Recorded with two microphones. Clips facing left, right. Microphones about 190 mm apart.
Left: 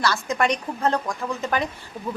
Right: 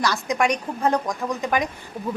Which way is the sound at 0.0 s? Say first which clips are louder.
Right 1 dB; 15° right (ahead or behind).